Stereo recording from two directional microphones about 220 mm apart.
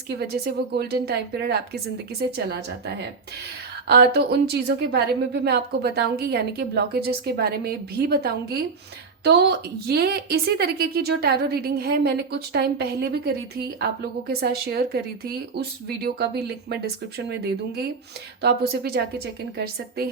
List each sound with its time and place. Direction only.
0.2 s a woman's voice: 45° right (ahead or behind)